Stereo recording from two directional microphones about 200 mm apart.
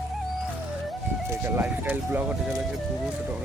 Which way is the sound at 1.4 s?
10° right (ahead or behind).